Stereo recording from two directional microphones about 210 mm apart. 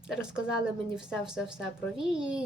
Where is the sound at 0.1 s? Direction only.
5° right (ahead or behind).